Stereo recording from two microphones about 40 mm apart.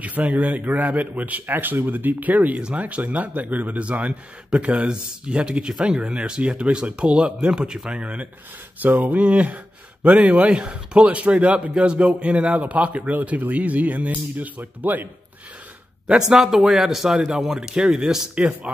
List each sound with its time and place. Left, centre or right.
0.0 s a man's voice: right; by 8.0 s centre
8.0 s speech: right
8.8 s speech: right
10.5 s a man's voice: right
16.1 s a man's voice: centre
18.3 s speech: right